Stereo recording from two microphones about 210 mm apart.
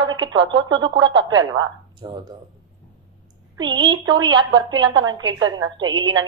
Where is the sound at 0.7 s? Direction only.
20° right (ahead or behind).